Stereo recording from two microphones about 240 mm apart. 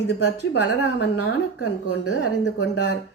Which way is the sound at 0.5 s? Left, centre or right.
Left.